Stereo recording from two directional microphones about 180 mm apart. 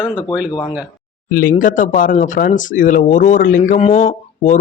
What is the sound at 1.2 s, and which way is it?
Speech, 55° left (ahead or behind).